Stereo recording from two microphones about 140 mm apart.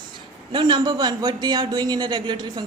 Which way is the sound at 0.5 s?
30° right (ahead or behind).